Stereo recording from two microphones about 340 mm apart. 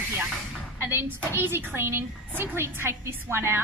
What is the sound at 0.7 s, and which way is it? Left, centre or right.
A woman's voice, centre.